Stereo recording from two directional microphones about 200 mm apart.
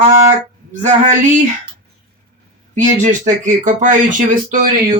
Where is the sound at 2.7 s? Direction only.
40° right (ahead or behind).